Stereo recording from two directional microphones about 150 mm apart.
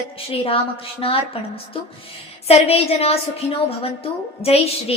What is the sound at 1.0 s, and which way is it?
Speech, 40° left (ahead or behind).